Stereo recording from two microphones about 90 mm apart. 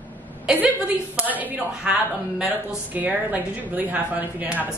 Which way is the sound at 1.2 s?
20° right (ahead or behind).